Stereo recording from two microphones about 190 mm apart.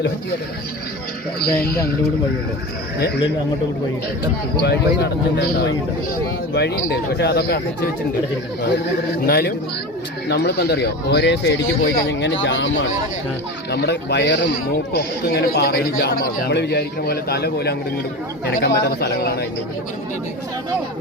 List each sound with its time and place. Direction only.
1.4 s speech: 55° left (ahead or behind)
4.6 s speech: 60° left (ahead or behind)
9.2 s speech: 55° left (ahead or behind); by 12.9 s 80° left
13.7 s speech: 60° left (ahead or behind)